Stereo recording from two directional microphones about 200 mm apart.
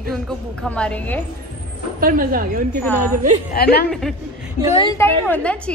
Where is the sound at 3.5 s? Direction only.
50° left (ahead or behind).